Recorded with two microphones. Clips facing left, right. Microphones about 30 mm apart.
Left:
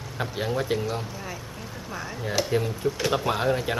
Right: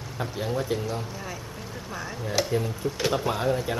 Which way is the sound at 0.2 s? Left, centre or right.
Left.